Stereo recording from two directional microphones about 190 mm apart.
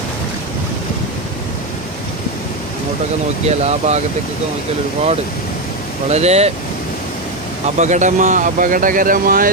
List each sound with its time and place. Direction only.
3.4 s speech: 35° right (ahead or behind)
6.0 s speech: 35° right (ahead or behind)
7.8 s speech: 40° right (ahead or behind)